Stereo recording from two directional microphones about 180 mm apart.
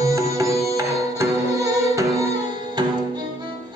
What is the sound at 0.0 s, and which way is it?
Music, 20° right (ahead or behind).